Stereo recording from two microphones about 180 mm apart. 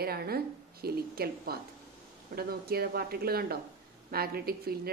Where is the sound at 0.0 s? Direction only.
60° right (ahead or behind).